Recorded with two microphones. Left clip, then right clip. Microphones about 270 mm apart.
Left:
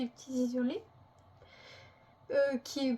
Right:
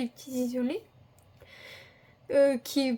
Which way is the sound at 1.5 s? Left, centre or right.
Right.